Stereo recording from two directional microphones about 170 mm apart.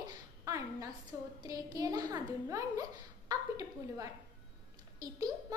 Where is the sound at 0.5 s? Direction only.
20° right (ahead or behind).